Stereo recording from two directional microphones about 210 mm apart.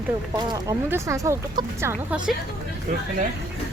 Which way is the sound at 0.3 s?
20° right (ahead or behind).